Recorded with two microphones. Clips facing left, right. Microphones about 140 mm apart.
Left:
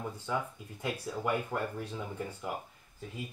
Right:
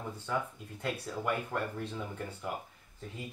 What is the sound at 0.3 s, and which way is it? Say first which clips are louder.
Speech: right 1 dB; 10° left (ahead or behind).